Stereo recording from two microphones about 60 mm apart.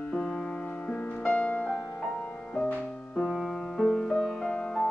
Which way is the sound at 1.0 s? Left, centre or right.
Left.